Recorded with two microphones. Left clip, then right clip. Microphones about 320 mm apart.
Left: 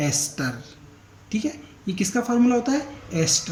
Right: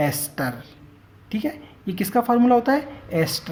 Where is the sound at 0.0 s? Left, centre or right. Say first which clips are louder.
Right 2 dB; centre.